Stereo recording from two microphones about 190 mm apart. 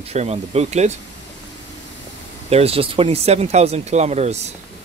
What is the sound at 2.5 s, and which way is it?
Speech, 30° right (ahead or behind).